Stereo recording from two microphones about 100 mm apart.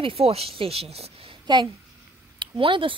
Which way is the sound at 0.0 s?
80° right.